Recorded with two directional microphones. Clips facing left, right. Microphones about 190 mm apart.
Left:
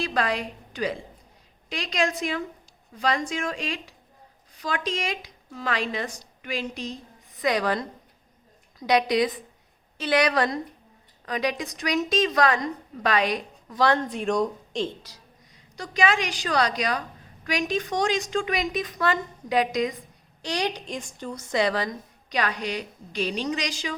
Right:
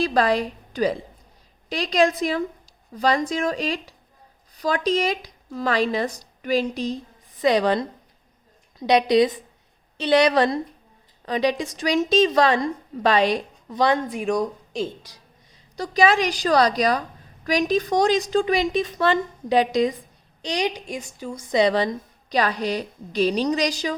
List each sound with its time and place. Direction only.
0.0 s a woman's voice: 35° right (ahead or behind); by 14.8 s 5° right (ahead or behind)
15.7 s a woman's voice: 35° right (ahead or behind)
20.4 s a woman's voice: 15° right (ahead or behind); by 23.9 s 40° right (ahead or behind)